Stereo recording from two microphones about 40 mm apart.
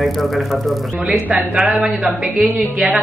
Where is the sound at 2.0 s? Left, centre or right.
Right.